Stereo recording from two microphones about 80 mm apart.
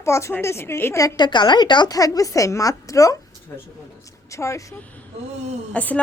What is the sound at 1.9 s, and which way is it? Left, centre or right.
A woman's voice, left.